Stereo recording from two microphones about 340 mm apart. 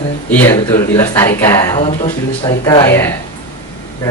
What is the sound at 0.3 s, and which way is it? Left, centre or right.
Speech, centre.